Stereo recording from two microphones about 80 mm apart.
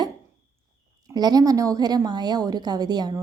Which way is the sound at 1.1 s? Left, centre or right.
Right.